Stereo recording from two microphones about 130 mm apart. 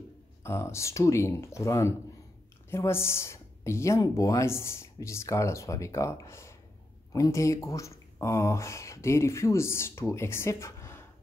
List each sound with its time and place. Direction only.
0.4 s speech: 20° left (ahead or behind)